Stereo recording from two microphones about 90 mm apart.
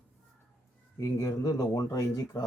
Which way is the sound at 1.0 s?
45° left (ahead or behind).